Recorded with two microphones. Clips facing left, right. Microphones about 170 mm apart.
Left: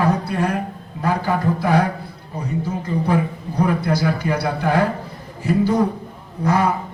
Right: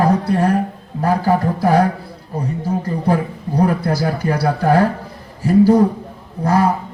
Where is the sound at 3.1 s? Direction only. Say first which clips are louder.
Right 5 dB; 40° right (ahead or behind).